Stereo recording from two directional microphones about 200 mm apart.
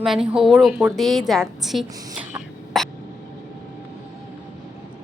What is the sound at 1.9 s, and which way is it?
Speech, 20° right (ahead or behind).